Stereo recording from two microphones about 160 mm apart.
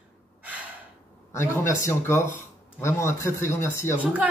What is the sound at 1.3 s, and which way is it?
Speech, 15° left (ahead or behind).